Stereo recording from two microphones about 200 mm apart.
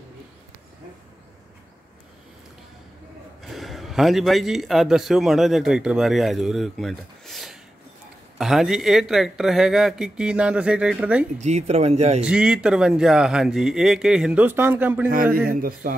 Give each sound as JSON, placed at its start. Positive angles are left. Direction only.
{"t": 3.4, "sound": "a man's voice", "side_deg": 0}
{"t": 11.3, "sound": "speech", "side_deg": -35}
{"t": 12.2, "sound": "speech", "side_deg": -5}
{"t": 15.3, "sound": "a man's voice", "side_deg": -45}